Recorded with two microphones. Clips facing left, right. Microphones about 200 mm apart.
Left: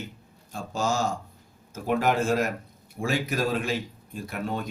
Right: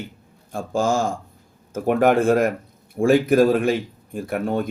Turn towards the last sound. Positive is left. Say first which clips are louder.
# right 8 dB
turn(degrees=-55)  # may be behind; listen again after turning